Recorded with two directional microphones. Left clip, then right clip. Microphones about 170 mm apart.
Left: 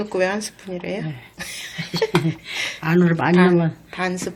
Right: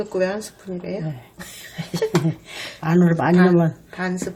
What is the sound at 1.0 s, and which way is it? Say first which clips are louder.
Speech: even; 20° right (ahead or behind).